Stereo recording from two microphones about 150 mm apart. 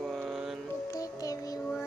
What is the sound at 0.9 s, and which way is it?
Music, 20° left (ahead or behind).